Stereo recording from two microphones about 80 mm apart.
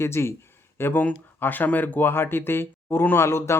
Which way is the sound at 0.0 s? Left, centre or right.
Left.